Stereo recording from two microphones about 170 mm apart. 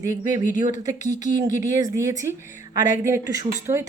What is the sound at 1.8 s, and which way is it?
Speech, 20° right (ahead or behind).